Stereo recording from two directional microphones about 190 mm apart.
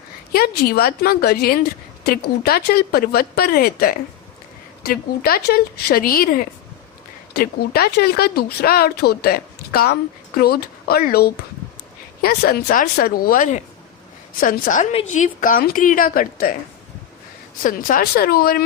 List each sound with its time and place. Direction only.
0.3 s speech: 55° left (ahead or behind)
17.6 s speech: 45° left (ahead or behind)